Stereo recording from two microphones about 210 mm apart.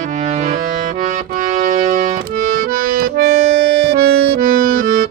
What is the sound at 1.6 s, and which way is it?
Music, 35° right (ahead or behind).